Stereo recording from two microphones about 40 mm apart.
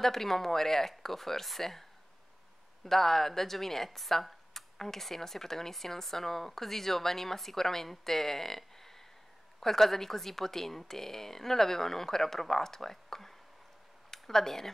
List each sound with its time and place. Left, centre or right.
0.0 s speech: centre